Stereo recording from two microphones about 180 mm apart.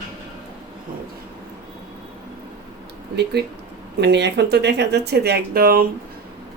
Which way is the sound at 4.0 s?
70° right (ahead or behind).